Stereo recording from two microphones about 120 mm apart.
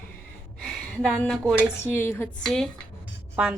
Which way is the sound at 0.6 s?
5° left (ahead or behind).